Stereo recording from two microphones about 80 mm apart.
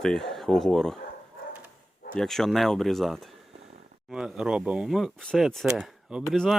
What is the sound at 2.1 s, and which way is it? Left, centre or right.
Speech, centre.